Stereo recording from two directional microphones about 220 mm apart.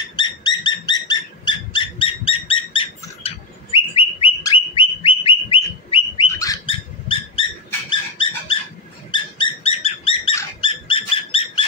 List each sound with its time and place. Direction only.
0.1 s dog: 20° left (ahead or behind)